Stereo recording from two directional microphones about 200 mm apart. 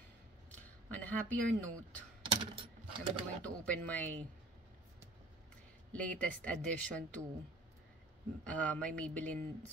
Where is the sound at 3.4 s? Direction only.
5° left (ahead or behind).